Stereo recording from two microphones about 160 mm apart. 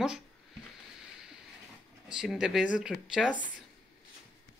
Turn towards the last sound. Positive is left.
turn(degrees=-5)  # may be behind; listen again after turning